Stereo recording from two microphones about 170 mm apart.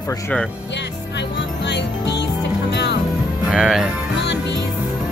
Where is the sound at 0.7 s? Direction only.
90° left.